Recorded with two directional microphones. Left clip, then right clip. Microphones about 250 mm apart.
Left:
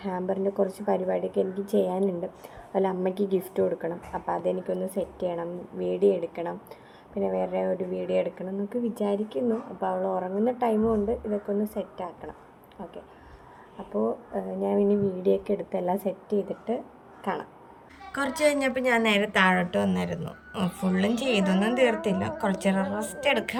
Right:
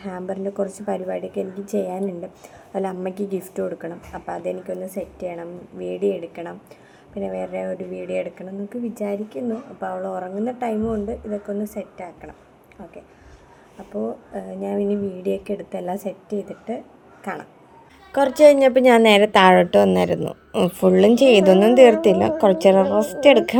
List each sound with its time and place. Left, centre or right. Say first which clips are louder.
0.1 s speech: even; centre
13.9 s speech: even; centre
18.1 s a woman's voice: right 12 dB; centre